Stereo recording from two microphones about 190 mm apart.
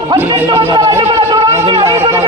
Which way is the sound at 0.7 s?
15° right (ahead or behind).